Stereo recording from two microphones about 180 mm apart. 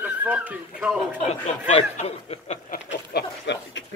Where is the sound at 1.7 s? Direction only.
35° left (ahead or behind).